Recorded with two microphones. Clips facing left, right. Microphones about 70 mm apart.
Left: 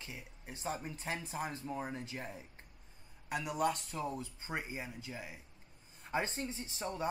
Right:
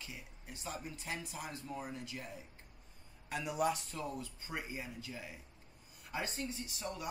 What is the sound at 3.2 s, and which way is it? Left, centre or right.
Speech, centre.